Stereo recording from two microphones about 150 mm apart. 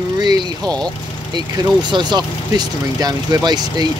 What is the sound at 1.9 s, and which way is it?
Speech, 30° right (ahead or behind).